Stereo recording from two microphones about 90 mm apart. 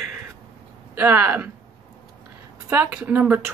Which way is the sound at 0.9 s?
20° right (ahead or behind).